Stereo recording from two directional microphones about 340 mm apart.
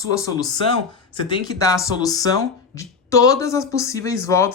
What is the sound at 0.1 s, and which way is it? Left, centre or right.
Speech, centre.